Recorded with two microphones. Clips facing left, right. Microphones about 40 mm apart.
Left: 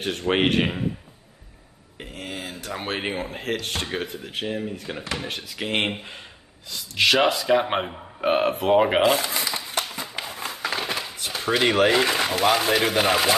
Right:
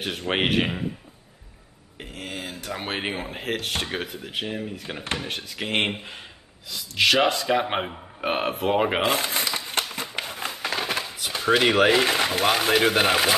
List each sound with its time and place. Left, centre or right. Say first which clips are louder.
0.0 s speech: left 3 dB; centre
2.0 s speech: left 1 dB; centre
9.0 s a sound: left 3 dB; right
10.8 s speech: right 1 dB; centre